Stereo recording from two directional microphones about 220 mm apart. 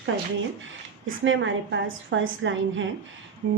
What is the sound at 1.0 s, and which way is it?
A woman's voice, 60° right (ahead or behind).